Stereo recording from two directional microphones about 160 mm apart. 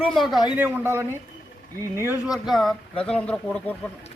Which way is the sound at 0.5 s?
10° right (ahead or behind).